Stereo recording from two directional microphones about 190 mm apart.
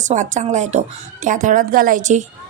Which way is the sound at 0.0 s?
40° right (ahead or behind).